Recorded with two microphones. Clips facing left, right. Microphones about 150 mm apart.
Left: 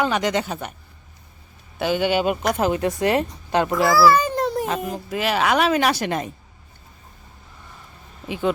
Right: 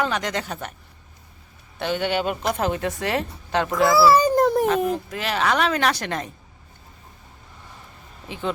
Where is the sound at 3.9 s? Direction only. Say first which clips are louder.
Right 1 dB; 25° right (ahead or behind).